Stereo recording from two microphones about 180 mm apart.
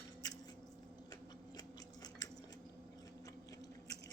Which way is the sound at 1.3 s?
20° left (ahead or behind).